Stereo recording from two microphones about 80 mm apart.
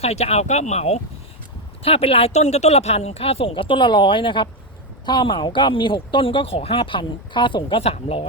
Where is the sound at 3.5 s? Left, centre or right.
Left.